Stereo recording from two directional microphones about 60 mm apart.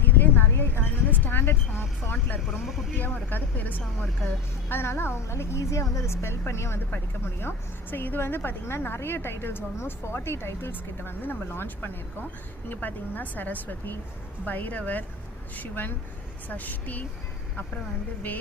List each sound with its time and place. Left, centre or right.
0.0 s a sound: left
2.5 s speech: centre
3.0 s speech: left
4.7 s a woman's voice: left
6.9 s a woman's voice: left